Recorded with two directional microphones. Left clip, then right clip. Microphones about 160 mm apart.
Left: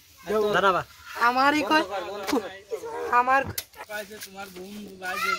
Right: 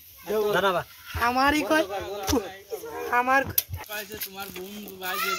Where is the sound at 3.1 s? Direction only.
25° right (ahead or behind).